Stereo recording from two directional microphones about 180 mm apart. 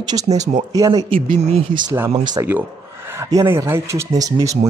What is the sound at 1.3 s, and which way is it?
Speech, 35° right (ahead or behind).